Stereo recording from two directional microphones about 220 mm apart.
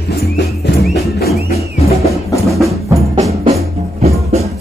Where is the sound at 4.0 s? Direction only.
30° right (ahead or behind).